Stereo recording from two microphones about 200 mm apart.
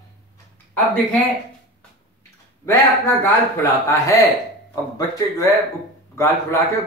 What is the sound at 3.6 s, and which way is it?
Speech, 15° left (ahead or behind).